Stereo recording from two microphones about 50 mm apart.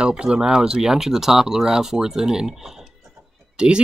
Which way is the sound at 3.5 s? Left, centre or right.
Centre.